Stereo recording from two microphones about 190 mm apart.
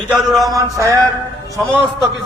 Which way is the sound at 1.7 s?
25° left (ahead or behind).